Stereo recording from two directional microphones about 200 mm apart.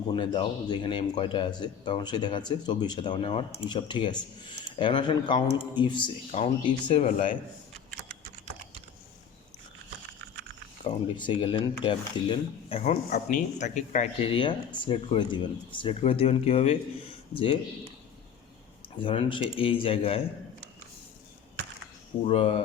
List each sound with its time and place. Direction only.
0.1 s speech: 25° left (ahead or behind)
10.8 s speech: 25° left (ahead or behind)
18.9 s speech: 25° left (ahead or behind)
22.2 s speech: 30° left (ahead or behind)